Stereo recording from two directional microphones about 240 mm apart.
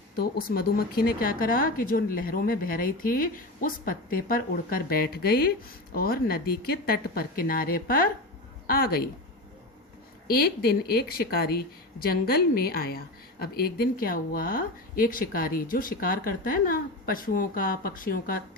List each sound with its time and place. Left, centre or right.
0.2 s speech: left
10.2 s speech: left